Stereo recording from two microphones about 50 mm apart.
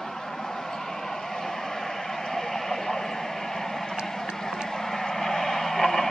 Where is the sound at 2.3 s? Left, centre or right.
Centre.